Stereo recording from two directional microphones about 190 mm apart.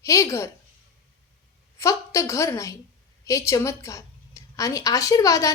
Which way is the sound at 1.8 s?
15° left (ahead or behind).